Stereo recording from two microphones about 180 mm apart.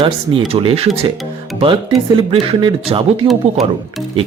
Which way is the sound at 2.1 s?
30° right (ahead or behind).